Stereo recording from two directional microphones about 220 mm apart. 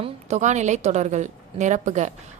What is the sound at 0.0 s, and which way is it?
A woman's voice, 30° right (ahead or behind).